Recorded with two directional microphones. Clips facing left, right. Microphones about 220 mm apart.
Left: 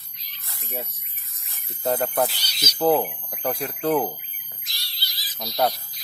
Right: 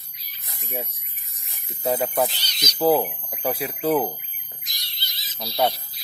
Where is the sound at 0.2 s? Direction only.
15° right (ahead or behind).